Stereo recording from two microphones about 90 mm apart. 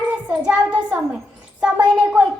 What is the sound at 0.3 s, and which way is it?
Child singing, 15° right (ahead or behind).